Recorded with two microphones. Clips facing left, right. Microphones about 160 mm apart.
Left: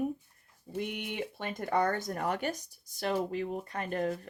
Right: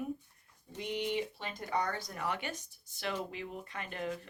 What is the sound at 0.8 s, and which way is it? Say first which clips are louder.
Speech: right 1 dB; 55° left (ahead or behind).